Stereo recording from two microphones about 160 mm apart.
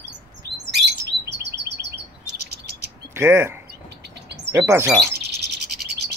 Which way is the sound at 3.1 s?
15° right (ahead or behind).